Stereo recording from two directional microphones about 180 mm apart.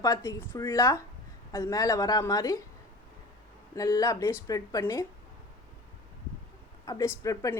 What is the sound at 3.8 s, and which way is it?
Speech, 20° left (ahead or behind).